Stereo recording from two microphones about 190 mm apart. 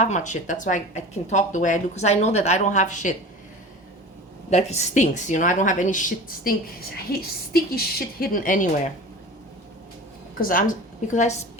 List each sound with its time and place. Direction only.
0.0 s a woman's voice: 40° left (ahead or behind)
4.4 s speech: 35° left (ahead or behind)
10.3 s a woman's voice: 45° left (ahead or behind)